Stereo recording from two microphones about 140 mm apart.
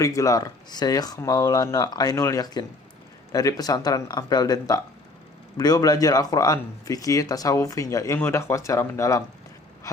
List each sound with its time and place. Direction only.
0.0 s speech: 25° left (ahead or behind)